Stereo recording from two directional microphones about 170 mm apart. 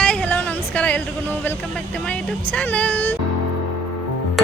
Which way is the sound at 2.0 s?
10° left (ahead or behind).